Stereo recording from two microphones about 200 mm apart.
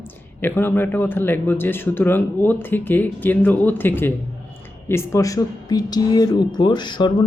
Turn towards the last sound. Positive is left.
turn(degrees=20)  # may be behind; listen again after turning